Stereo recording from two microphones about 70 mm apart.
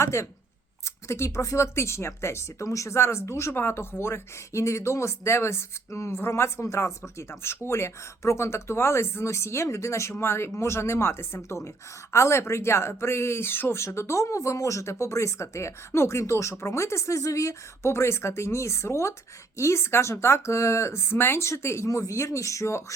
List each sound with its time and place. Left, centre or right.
0.0 s speech: left